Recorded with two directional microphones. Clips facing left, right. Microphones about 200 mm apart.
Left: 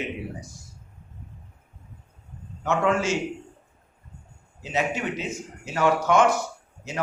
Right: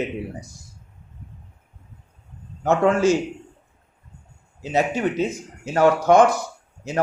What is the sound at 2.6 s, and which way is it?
Speech, 40° right (ahead or behind).